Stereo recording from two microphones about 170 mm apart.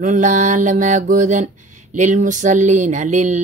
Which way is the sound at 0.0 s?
45° right (ahead or behind).